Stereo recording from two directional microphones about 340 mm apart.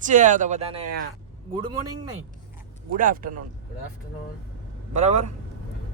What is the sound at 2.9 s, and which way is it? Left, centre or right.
Speech, right.